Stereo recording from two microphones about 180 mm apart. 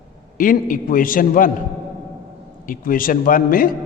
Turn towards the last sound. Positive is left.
turn(degrees=50)  # may be behind; listen again after turning